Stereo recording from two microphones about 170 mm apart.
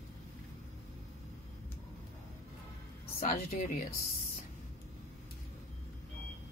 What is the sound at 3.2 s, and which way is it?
Speech, 45° left (ahead or behind).